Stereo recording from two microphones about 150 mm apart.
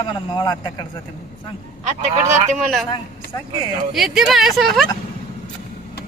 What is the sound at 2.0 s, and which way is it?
Speech, 50° right (ahead or behind).